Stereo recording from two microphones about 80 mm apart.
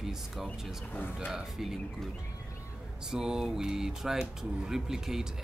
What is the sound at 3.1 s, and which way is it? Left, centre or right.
Speech, centre.